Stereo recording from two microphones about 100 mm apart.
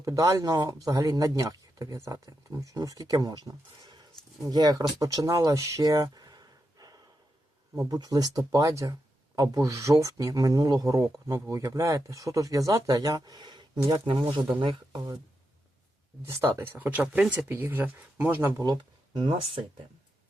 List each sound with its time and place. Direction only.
0.0 s speech: 35° right (ahead or behind)
14.0 s speech: 55° right (ahead or behind)
14.9 s speech: 40° right (ahead or behind)
16.2 s speech: 25° right (ahead or behind)
18.6 s speech: 45° right (ahead or behind)